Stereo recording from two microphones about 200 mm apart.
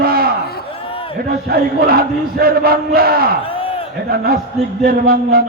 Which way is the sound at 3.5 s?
25° left (ahead or behind).